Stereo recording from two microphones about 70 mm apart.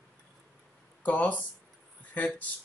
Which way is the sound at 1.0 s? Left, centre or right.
Left.